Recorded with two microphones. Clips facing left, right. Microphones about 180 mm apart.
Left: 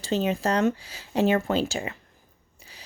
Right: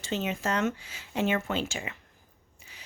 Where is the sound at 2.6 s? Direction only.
35° left (ahead or behind).